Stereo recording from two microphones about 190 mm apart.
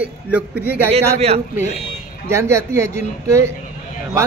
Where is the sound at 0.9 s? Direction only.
35° right (ahead or behind).